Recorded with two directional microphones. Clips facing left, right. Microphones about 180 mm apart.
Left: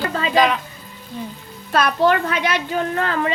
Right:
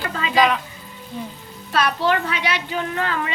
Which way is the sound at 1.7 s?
50° left (ahead or behind).